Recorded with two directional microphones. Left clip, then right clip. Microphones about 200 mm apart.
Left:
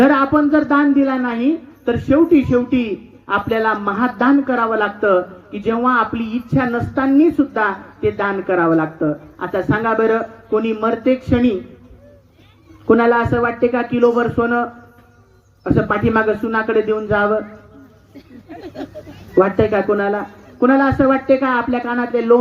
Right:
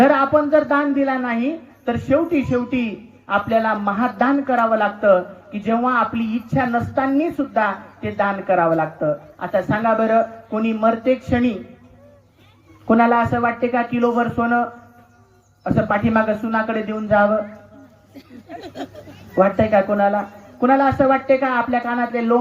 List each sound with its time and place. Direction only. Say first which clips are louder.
0.0 s a woman's voice: left 1 dB; 30° left (ahead or behind)
12.9 s a woman's voice: left 2 dB; 30° left (ahead or behind)
18.6 s a sound: left 2 dB; 45° right (ahead or behind)
19.4 s a woman's voice: left 1 dB; 35° left (ahead or behind)